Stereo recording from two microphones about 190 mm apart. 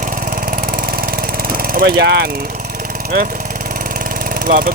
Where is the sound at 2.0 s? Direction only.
60° right (ahead or behind).